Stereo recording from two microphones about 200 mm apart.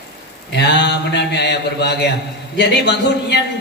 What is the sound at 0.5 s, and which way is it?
A man's voice, 60° left (ahead or behind).